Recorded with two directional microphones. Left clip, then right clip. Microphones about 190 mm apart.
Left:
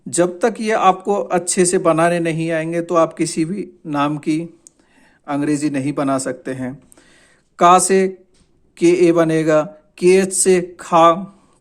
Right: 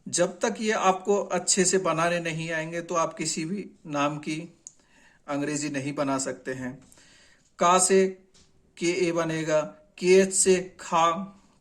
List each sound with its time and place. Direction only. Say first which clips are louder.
0.1 s speech: left 9 dB; 40° left (ahead or behind)